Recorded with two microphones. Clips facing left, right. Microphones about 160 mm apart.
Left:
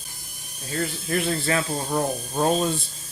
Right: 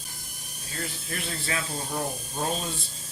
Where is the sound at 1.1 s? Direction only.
60° left (ahead or behind).